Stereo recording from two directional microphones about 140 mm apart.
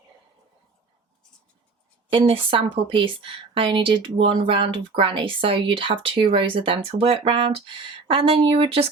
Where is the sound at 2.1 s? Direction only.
40° right (ahead or behind).